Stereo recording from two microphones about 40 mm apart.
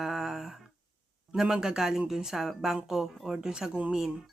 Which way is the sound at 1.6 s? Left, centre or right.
Centre.